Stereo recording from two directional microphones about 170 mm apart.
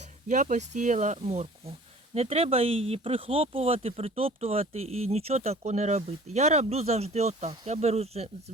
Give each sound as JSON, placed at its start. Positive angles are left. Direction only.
{"t": 0.3, "sound": "speech", "side_deg": -45}